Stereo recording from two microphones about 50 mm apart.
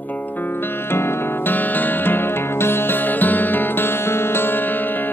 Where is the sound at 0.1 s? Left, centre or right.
Left.